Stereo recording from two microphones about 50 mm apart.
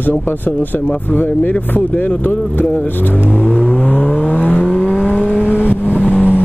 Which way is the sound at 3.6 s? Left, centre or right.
Left.